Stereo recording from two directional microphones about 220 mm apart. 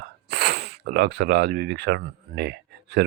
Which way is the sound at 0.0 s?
45° right (ahead or behind).